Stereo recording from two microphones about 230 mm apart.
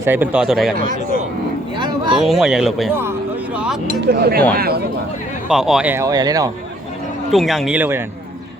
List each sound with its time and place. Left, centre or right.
0.0 s speech: centre
1.7 s vehicle: centre
2.1 s speech: centre
3.0 s a sound: centre
4.0 s speech: right
5.5 s speech: centre
7.3 s speech: centre